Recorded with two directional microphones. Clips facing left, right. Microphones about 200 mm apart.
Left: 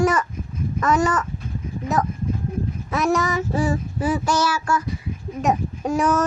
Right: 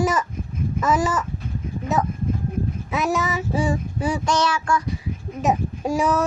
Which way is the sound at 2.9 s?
Centre (ahead or behind).